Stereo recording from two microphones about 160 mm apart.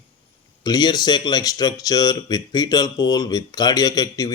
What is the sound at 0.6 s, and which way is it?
Speech, 25° left (ahead or behind).